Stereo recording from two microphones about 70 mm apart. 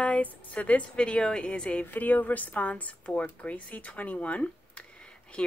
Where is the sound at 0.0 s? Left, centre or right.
Left.